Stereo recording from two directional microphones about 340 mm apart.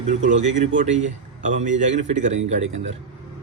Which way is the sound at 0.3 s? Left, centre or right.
Centre.